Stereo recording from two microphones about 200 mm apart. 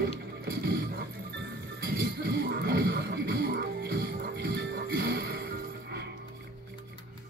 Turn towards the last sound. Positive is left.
turn(degrees=-50)  # may be behind; listen again after turning